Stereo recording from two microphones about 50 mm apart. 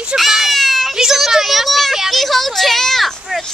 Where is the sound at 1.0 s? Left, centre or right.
Centre.